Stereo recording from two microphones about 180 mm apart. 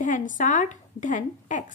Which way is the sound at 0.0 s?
45° left (ahead or behind).